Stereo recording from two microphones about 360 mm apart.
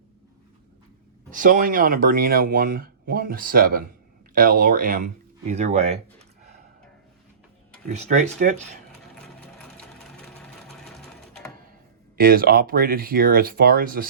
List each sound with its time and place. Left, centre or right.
1.3 s speech: right
7.9 s speech: centre
9.6 s sewing machine: centre
12.1 s speech: right